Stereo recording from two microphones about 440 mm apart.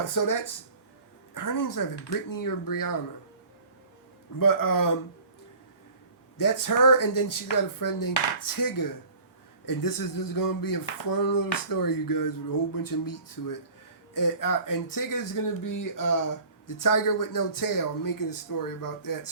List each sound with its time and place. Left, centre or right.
0.0 s speech: left
4.4 s speech: left
6.3 s speech: left